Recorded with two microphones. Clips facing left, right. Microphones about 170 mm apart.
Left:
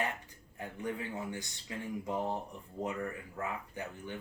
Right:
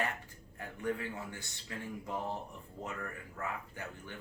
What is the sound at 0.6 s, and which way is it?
Speech, 15° left (ahead or behind).